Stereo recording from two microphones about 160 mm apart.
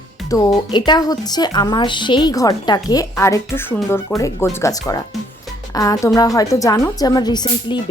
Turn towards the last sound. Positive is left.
turn(degrees=25)  # may be behind; listen again after turning